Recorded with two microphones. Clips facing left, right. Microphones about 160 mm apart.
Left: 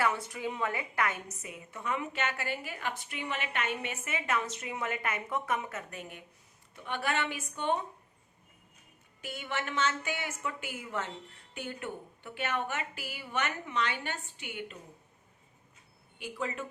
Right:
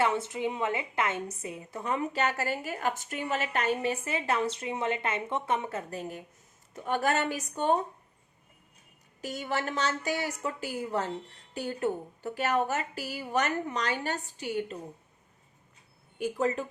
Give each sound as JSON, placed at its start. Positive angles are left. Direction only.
{"t": 0.0, "sound": "a woman's voice", "side_deg": -25}
{"t": 9.2, "sound": "a woman's voice", "side_deg": -40}
{"t": 16.1, "sound": "speech", "side_deg": -45}